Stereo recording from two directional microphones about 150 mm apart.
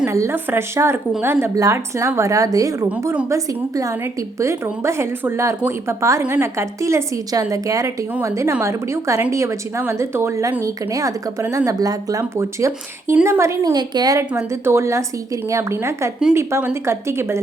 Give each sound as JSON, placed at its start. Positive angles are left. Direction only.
{"t": 0.1, "sound": "a woman's voice", "side_deg": -20}